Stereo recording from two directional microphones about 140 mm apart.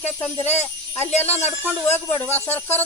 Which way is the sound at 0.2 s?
10° left (ahead or behind).